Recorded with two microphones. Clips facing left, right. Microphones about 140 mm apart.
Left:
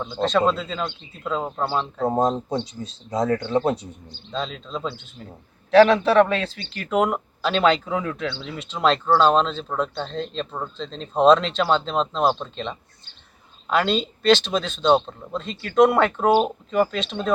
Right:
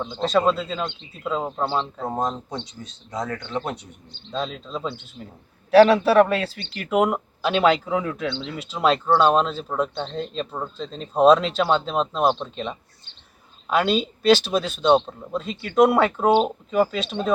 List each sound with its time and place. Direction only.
0.0 s speech: 5° right (ahead or behind)
1.6 s speech: 5° left (ahead or behind)
2.0 s speech: 30° left (ahead or behind)
4.3 s speech: 5° right (ahead or behind)
8.3 s speech: 5° left (ahead or behind)
8.5 s speech: 5° right (ahead or behind)
12.2 s speech: 5° left (ahead or behind)
13.7 s speech: 5° right (ahead or behind)
14.8 s speech: 5° left (ahead or behind)
15.3 s speech: 5° right (ahead or behind)